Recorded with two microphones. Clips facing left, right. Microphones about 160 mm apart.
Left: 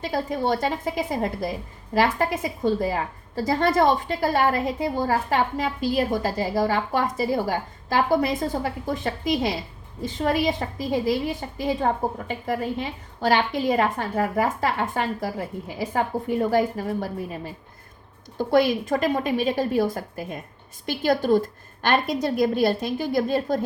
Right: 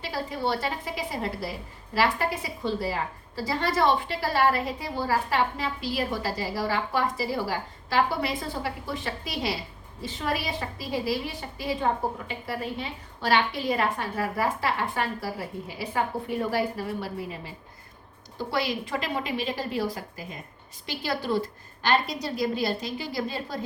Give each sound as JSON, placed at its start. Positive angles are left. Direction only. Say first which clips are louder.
{"t": 0.0, "sound": "a woman's voice", "louder": "left 5 dB", "side_deg": 45}